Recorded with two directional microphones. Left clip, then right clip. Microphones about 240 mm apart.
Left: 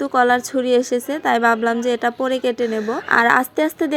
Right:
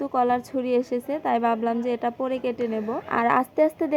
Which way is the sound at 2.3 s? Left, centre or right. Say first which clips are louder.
Left 7 dB; left.